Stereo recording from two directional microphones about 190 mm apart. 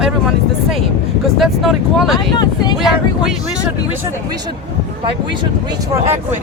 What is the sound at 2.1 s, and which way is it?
Speech, 20° left (ahead or behind).